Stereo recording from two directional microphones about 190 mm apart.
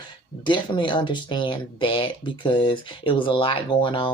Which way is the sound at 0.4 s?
25° left (ahead or behind).